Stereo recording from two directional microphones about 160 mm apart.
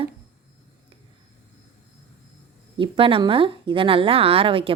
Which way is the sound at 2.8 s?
35° right (ahead or behind).